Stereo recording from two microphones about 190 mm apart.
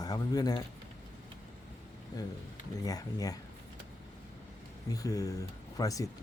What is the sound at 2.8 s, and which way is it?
Speech, 20° left (ahead or behind).